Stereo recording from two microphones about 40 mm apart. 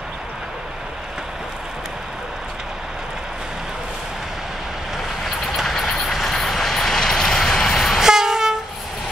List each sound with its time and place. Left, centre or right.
5.6 s vehicle: centre
8.0 s train: centre